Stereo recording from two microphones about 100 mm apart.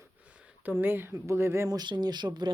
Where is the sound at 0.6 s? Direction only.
20° right (ahead or behind).